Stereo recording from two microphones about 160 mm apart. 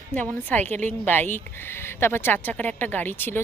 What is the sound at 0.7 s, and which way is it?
Speech, 50° right (ahead or behind).